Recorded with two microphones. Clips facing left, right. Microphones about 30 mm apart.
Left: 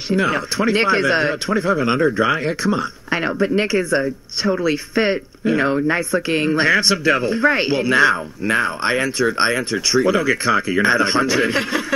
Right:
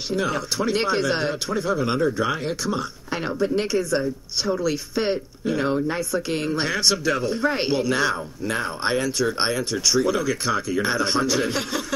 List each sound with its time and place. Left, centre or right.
0.1 s speech: left
8.5 s speech: left
8.9 s speech: left